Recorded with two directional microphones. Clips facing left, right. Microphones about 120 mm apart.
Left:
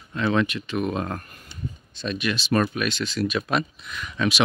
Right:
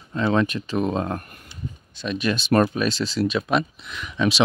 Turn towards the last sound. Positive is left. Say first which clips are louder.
# right 2 dB
turn(degrees=-20)  # may be behind; listen again after turning